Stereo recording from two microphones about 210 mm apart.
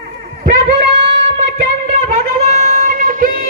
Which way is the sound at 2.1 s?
40° right (ahead or behind).